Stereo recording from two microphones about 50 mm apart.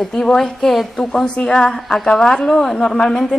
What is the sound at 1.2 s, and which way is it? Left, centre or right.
A woman's voice, left.